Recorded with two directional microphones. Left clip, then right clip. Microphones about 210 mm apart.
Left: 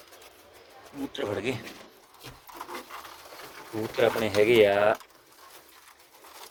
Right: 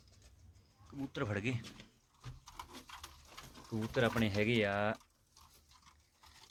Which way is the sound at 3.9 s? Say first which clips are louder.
Left 11 dB; 5° right (ahead or behind).